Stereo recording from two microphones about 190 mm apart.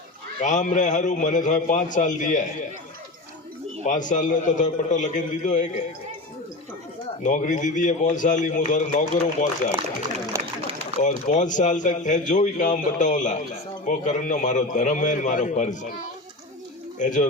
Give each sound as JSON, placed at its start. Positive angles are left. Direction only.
{"t": 0.3, "sound": "speech", "side_deg": 40}
{"t": 3.8, "sound": "speech", "side_deg": 40}
{"t": 7.2, "sound": "speech", "side_deg": 40}
{"t": 10.3, "sound": "a sound", "side_deg": -15}
{"t": 10.8, "sound": "speech", "side_deg": 40}
{"t": 17.0, "sound": "speech", "side_deg": 40}